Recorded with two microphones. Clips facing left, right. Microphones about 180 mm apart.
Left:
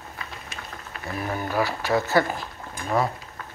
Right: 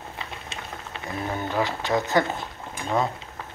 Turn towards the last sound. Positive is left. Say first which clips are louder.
# left 1 dB
turn(degrees=-20)  # may be behind; listen again after turning